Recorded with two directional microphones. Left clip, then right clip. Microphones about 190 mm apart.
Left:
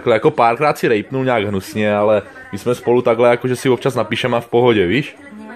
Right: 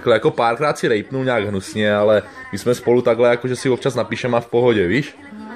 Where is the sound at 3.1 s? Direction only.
15° left (ahead or behind).